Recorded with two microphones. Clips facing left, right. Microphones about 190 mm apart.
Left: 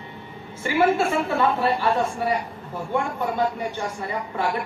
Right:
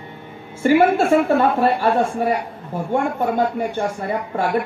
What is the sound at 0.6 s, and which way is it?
Speech, 55° right (ahead or behind).